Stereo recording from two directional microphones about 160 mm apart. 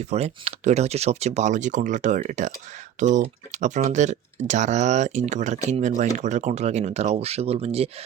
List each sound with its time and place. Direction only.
0.0 s speech: 40° right (ahead or behind)